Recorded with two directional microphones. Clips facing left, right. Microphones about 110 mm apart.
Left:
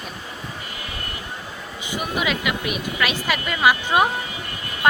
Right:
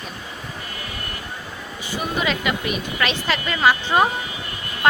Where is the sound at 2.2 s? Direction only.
5° left (ahead or behind).